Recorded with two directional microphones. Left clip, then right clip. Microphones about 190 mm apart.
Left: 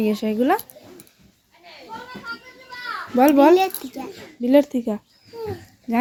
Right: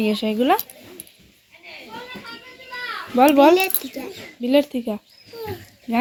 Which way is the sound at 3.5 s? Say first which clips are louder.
Left 1 dB; 45° left (ahead or behind).